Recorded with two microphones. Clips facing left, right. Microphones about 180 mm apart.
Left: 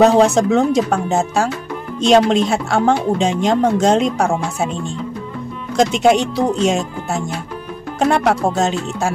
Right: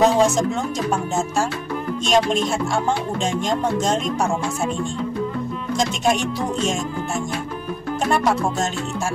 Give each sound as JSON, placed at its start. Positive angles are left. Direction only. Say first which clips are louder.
{"t": 0.0, "sound": "speech", "louder": "left 5 dB", "side_deg": 65}
{"t": 5.8, "sound": "speech", "louder": "left 8 dB", "side_deg": 65}
{"t": 8.1, "sound": "music", "louder": "left 3 dB", "side_deg": 70}